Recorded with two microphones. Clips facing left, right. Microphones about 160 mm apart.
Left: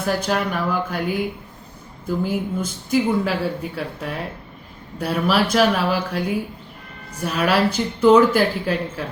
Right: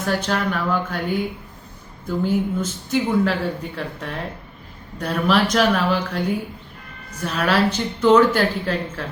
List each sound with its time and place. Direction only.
0.0 s speech: 10° left (ahead or behind)